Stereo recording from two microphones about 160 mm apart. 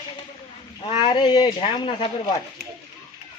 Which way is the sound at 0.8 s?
35° left (ahead or behind).